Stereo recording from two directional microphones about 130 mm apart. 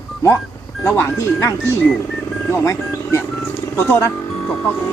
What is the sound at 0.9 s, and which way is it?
Speech, 20° left (ahead or behind).